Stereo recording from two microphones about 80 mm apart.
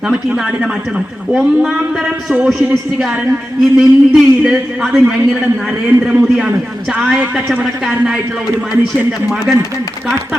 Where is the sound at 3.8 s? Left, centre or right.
Centre.